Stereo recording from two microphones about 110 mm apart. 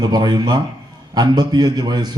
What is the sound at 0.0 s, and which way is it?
Speech, 40° right (ahead or behind).